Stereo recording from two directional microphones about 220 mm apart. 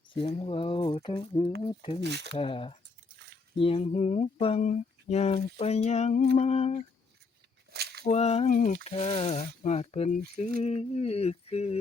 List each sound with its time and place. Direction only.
0.1 s speech: 25° left (ahead or behind)
2.0 s speech: 50° right (ahead or behind)
2.4 s speech: 25° left (ahead or behind)
7.7 s a sound: 45° right (ahead or behind)
8.0 s speech: 30° left (ahead or behind)